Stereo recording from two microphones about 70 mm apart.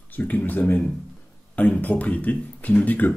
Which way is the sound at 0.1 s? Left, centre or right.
Left.